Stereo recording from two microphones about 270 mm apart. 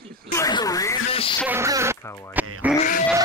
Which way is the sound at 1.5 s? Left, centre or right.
Centre.